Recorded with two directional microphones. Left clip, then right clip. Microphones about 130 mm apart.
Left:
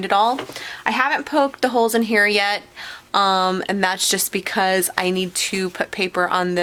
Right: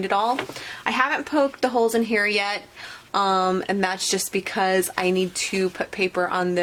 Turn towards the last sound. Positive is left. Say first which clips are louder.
# left 4 dB
turn(degrees=45)  # may be behind; listen again after turning